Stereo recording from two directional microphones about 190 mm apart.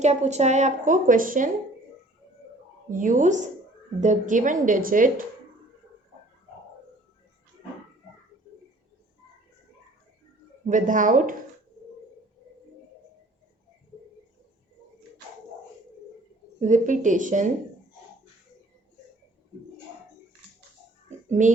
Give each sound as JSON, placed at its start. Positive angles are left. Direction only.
{"t": 0.0, "sound": "a woman's voice", "side_deg": -35}
{"t": 2.9, "sound": "a woman's voice", "side_deg": -45}
{"t": 10.7, "sound": "a woman's voice", "side_deg": -45}
{"t": 16.6, "sound": "a woman's voice", "side_deg": -40}
{"t": 21.2, "sound": "a child's voice", "side_deg": -40}